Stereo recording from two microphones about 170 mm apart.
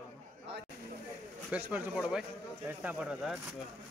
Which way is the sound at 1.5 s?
5° right (ahead or behind).